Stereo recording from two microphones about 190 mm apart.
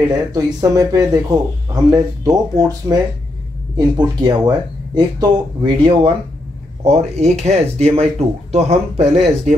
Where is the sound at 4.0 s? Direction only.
25° right (ahead or behind).